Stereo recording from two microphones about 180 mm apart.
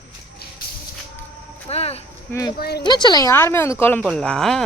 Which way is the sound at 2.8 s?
25° left (ahead or behind).